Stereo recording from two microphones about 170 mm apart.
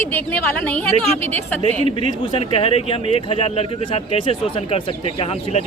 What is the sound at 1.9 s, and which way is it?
Speech, 30° left (ahead or behind).